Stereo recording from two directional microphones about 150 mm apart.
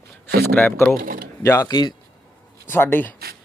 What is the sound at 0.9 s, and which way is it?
Typing, 70° right (ahead or behind).